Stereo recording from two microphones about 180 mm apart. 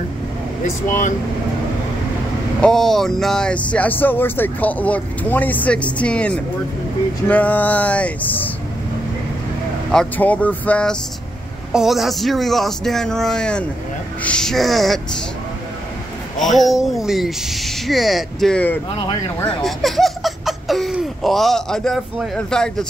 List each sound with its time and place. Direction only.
2.6 s speech: centre (ahead or behind)
9.8 s speech: 5° left (ahead or behind)
16.3 s speech: centre (ahead or behind)
19.0 s speech: 25° left (ahead or behind)
19.6 s speech: centre (ahead or behind)